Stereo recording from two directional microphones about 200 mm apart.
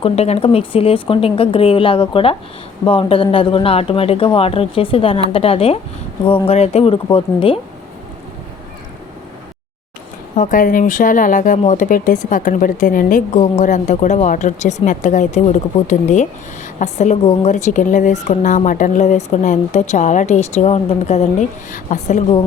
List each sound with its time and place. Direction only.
0.0 s speech: 30° left (ahead or behind)
10.3 s a woman's voice: 40° left (ahead or behind)